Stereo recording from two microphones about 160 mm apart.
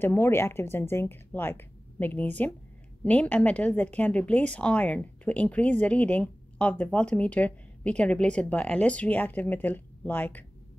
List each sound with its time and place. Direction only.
0.0 s a woman's voice: 15° left (ahead or behind)